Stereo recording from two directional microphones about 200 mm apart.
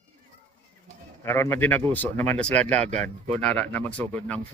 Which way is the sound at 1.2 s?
10° left (ahead or behind).